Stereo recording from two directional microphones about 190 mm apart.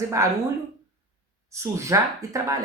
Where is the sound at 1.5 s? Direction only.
15° right (ahead or behind).